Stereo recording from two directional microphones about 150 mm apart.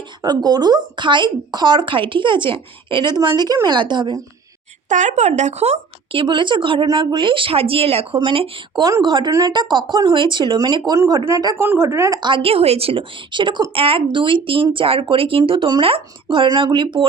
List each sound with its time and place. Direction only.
0.2 s a woman's voice: 25° right (ahead or behind)
4.9 s a woman's voice: 55° right (ahead or behind); by 17.1 s 30° right (ahead or behind)